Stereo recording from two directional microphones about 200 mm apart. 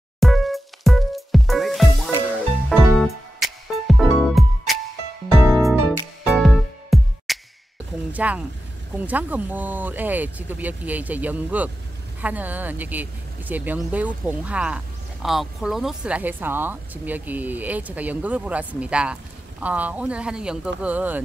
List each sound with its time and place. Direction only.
0.2 s music: centre (ahead or behind)
8.1 s speech: 5° right (ahead or behind)